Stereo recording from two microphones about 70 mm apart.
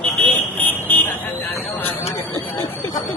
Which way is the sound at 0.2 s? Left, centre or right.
Left.